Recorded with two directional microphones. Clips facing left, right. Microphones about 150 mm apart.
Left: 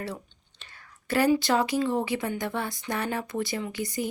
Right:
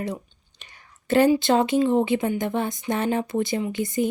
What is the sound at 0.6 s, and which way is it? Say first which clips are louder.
Speech: right 1 dB; 25° right (ahead or behind).